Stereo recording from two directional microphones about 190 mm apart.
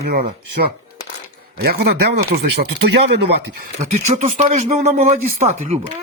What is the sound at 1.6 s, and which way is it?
Speech, 55° right (ahead or behind).